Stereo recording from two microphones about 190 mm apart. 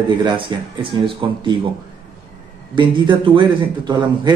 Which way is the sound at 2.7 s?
25° right (ahead or behind).